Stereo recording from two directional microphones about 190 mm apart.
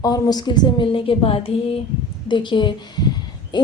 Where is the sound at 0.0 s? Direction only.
20° left (ahead or behind).